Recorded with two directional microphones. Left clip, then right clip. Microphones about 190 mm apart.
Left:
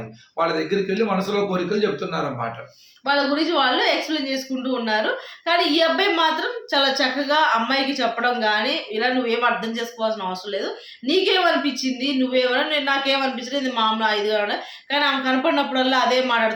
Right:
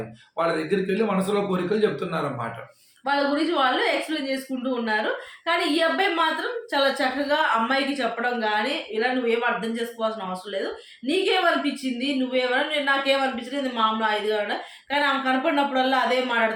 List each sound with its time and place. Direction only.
0.3 s a man's voice: 10° right (ahead or behind)
3.1 s speech: 15° left (ahead or behind)